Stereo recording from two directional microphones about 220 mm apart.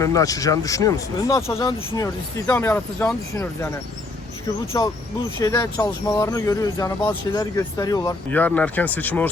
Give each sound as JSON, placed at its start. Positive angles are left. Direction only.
{"t": 0.0, "sound": "speech", "side_deg": 15}
{"t": 4.7, "sound": "speech", "side_deg": 15}